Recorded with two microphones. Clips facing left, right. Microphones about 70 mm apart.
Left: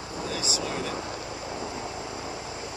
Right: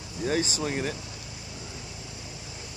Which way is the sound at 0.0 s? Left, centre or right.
Left.